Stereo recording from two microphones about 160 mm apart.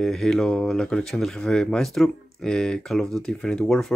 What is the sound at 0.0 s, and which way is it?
Speech, 5° left (ahead or behind).